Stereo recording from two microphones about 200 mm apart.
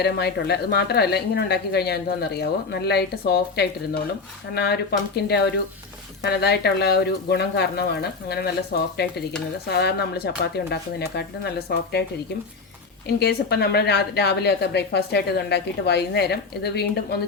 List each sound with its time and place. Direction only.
0.0 s a woman's voice: 55° left (ahead or behind)
13.1 s a woman's voice: 55° left (ahead or behind)